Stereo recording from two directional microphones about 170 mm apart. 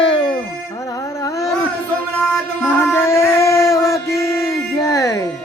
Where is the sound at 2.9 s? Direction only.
15° left (ahead or behind).